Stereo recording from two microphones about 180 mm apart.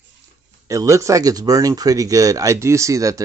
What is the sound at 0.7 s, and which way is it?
Speech, 15° right (ahead or behind).